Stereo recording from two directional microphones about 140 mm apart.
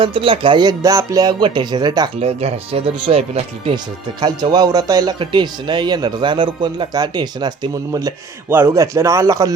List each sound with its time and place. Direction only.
0.0 s speech: 40° right (ahead or behind)
2.1 s speech: 45° right (ahead or behind)
4.2 s speech: 30° right (ahead or behind)
8.4 s speech: 15° right (ahead or behind)